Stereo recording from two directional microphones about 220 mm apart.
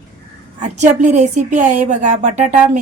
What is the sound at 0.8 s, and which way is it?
Speech, 35° right (ahead or behind).